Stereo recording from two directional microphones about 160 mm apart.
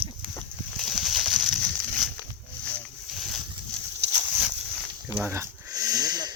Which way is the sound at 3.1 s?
Centre (ahead or behind).